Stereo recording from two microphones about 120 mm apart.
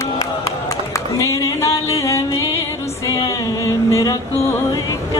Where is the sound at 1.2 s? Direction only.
25° left (ahead or behind).